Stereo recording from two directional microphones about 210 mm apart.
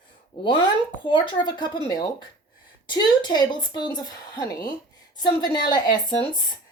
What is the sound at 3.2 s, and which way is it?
Speech, 20° left (ahead or behind).